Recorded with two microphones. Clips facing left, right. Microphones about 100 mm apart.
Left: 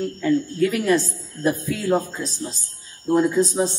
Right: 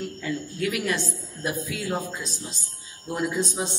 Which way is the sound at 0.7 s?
35° left (ahead or behind).